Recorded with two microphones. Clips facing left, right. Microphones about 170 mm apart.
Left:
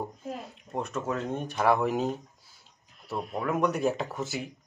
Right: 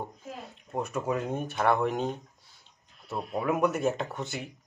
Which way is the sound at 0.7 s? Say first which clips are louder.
Right 1 dB; 10° right (ahead or behind).